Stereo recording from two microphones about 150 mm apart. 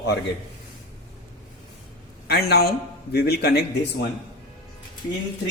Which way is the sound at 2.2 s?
90° left.